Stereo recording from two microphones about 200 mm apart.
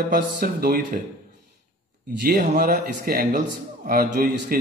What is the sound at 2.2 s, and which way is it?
Speech, 45° right (ahead or behind).